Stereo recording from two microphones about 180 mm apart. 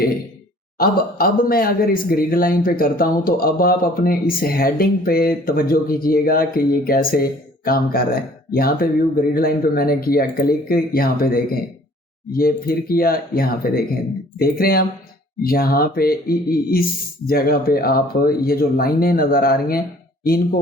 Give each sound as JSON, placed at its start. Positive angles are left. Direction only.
{"t": 0.8, "sound": "speech", "side_deg": 55}